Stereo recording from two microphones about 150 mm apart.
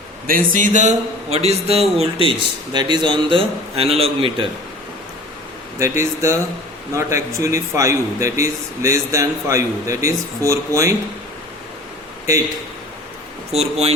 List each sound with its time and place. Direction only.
0.3 s a man's voice: 65° right (ahead or behind); by 4.4 s 40° right (ahead or behind)
5.8 s a man's voice: 20° right (ahead or behind)
13.5 s a man's voice: 45° right (ahead or behind)